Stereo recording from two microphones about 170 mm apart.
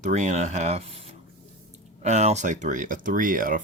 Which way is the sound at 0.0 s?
45° right (ahead or behind).